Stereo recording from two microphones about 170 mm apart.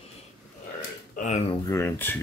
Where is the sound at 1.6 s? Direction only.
15° left (ahead or behind).